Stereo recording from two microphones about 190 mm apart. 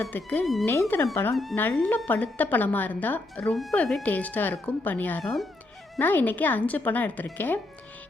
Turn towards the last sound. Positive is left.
turn(degrees=10)  # may be behind; listen again after turning